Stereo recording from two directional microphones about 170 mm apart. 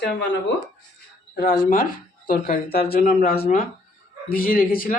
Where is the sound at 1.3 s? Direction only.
60° left (ahead or behind).